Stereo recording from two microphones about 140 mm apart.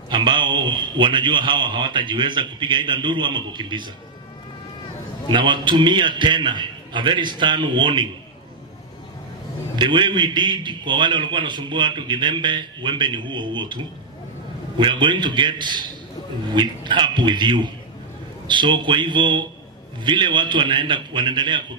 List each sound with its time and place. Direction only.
0.1 s a man's voice: 35° right (ahead or behind)
5.3 s a man's voice: 35° right (ahead or behind)
9.8 s a man's voice: 35° right (ahead or behind)